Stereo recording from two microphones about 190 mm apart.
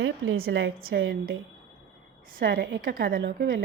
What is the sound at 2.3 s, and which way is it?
Speech, 50° right (ahead or behind).